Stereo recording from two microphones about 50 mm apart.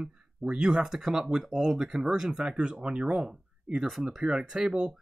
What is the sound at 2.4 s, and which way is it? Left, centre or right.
Speech, right.